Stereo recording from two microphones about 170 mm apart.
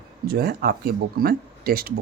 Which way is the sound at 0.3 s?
65° right (ahead or behind).